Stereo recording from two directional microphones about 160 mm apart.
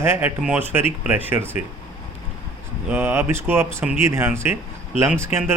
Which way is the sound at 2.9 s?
15° right (ahead or behind).